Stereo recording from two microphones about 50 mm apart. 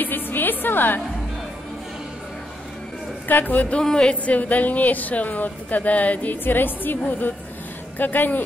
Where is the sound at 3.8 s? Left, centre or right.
Centre.